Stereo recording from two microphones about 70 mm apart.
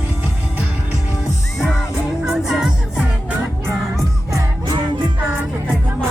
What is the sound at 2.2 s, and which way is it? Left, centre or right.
Music, centre.